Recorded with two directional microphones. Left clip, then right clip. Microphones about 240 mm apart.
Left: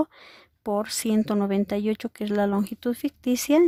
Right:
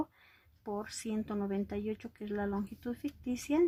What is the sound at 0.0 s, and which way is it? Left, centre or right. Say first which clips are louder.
A woman's voice: left 12 dB; left.